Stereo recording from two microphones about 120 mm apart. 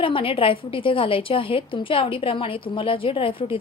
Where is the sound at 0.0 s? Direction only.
45° left (ahead or behind).